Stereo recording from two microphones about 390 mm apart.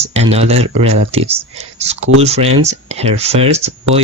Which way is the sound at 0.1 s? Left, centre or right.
Centre.